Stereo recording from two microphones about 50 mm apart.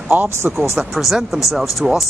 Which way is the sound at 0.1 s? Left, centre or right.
Right.